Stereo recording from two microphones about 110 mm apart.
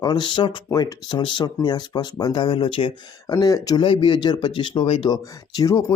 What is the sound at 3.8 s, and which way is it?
Speech, 50° left (ahead or behind).